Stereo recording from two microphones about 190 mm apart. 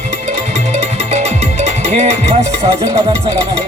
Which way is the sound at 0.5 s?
35° right (ahead or behind).